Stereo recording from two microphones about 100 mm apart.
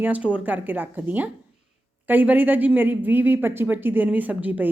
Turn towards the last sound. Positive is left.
turn(degrees=-15)  # may be behind; listen again after turning